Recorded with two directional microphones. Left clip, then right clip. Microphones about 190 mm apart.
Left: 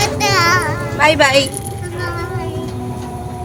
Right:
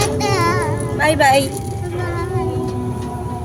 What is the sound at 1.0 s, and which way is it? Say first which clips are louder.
Speech: left 2 dB; 20° left (ahead or behind).